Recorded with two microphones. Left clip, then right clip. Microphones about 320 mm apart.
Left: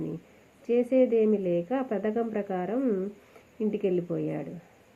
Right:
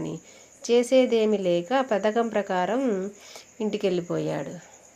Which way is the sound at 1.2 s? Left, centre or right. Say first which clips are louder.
Right 2 dB; right.